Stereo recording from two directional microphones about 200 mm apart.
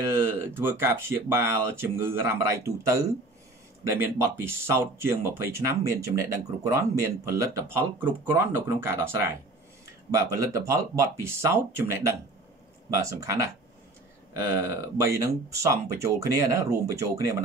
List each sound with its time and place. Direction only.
0.0 s speech: 10° right (ahead or behind)